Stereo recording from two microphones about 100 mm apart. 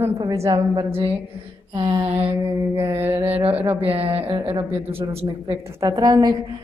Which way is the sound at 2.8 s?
25° right (ahead or behind).